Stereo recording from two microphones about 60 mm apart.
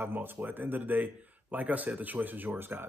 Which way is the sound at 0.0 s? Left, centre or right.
Right.